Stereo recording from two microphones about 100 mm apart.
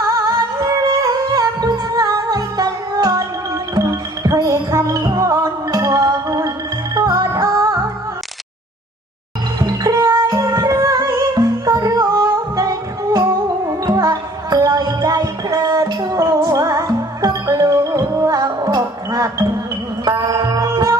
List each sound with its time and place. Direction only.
0.0 s music: 35° right (ahead or behind)
9.6 s music: 35° right (ahead or behind)
13.8 s music: 35° right (ahead or behind)
18.3 s music: 40° right (ahead or behind)